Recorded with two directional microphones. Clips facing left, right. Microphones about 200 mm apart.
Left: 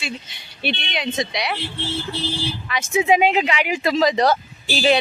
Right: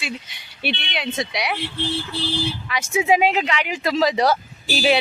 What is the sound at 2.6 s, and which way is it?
Speech, 10° right (ahead or behind).